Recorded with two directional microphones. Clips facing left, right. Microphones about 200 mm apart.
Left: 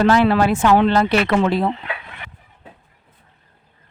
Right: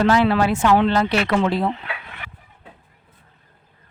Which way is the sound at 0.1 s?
50° left (ahead or behind).